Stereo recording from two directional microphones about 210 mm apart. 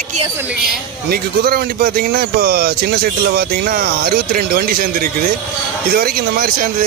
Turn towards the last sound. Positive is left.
turn(degrees=-40)  # may be behind; listen again after turning